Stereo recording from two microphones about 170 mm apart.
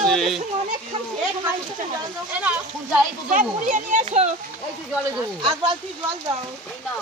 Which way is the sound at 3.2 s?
50° right (ahead or behind).